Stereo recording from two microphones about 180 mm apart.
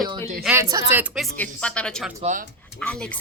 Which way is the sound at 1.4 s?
5° left (ahead or behind).